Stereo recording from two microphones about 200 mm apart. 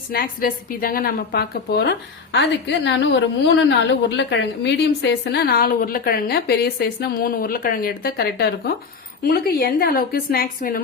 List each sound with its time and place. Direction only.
0.1 s a woman's voice: 45° left (ahead or behind)